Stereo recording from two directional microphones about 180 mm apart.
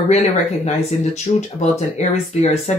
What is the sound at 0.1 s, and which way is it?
Speech, 35° left (ahead or behind).